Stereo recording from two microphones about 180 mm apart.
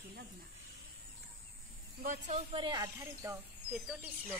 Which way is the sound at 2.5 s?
25° right (ahead or behind).